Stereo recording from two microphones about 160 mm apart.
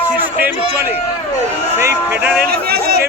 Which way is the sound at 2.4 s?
70° right (ahead or behind).